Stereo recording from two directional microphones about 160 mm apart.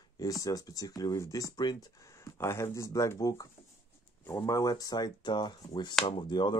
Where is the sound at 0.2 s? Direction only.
20° left (ahead or behind).